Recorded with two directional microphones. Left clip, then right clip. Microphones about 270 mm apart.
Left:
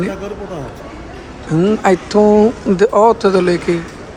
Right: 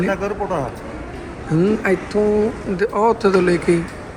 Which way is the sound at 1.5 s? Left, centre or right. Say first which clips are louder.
Left 5 dB; centre.